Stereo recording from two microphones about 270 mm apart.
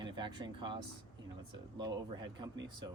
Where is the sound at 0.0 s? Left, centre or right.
Centre.